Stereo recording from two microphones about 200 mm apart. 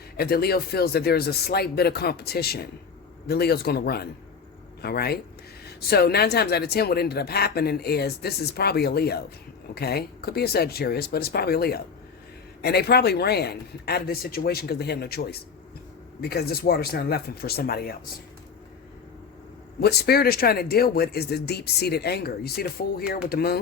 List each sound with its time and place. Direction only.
0.2 s speech: 50° left (ahead or behind)
19.8 s speech: 55° left (ahead or behind)